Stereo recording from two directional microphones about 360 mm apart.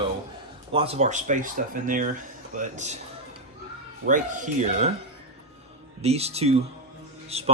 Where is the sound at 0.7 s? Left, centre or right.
Centre.